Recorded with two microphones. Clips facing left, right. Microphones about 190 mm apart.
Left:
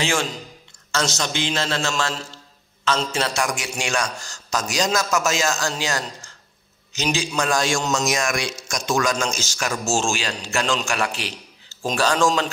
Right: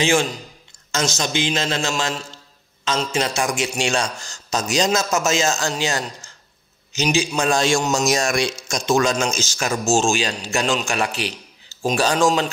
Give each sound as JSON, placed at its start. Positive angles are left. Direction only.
{"t": 0.0, "sound": "a man's voice", "side_deg": -20}